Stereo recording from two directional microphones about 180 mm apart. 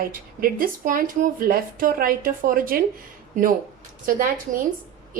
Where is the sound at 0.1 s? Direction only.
50° right (ahead or behind).